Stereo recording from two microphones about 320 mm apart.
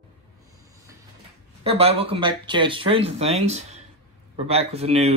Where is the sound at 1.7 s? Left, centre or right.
Centre.